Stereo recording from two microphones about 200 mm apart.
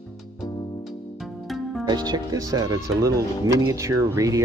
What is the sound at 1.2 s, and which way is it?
Music, centre (ahead or behind).